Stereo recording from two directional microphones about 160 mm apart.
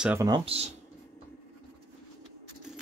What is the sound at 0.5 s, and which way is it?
Speech, 35° right (ahead or behind).